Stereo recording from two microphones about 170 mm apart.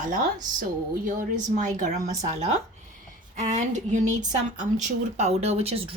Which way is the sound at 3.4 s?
45° right (ahead or behind).